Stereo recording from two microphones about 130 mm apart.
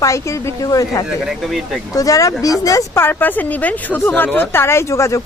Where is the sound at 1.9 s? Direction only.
25° left (ahead or behind).